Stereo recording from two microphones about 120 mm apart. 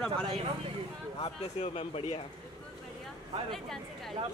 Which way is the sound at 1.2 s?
60° left (ahead or behind).